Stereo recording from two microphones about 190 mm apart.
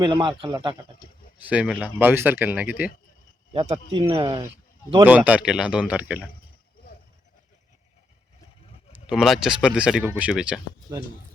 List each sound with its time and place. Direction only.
0.0 s speech: 25° right (ahead or behind)
1.4 s speech: 5° right (ahead or behind)
3.5 s speech: 30° right (ahead or behind)
5.0 s speech: 10° right (ahead or behind)
8.9 s speech: 5° right (ahead or behind)